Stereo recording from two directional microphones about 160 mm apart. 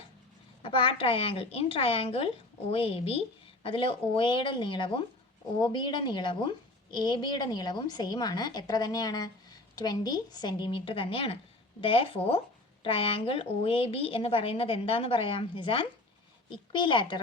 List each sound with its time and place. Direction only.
0.6 s a woman's voice: 35° left (ahead or behind)